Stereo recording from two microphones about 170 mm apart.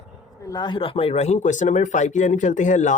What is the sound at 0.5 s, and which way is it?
Speech, 25° left (ahead or behind).